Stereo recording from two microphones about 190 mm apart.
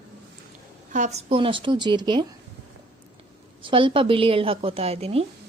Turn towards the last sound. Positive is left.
turn(degrees=-30)  # may be behind; listen again after turning